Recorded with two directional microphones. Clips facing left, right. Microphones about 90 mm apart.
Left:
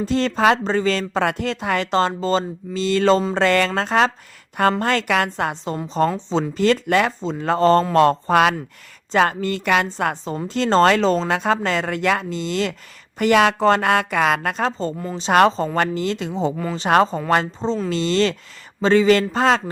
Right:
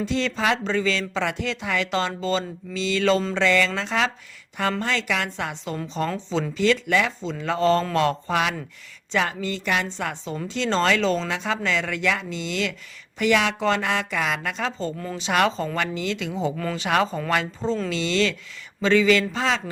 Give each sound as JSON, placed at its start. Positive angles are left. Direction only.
{"t": 0.0, "sound": "speech", "side_deg": 45}
{"t": 3.3, "sound": "speech", "side_deg": 50}